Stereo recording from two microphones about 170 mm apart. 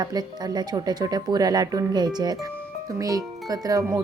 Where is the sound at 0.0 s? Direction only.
25° right (ahead or behind).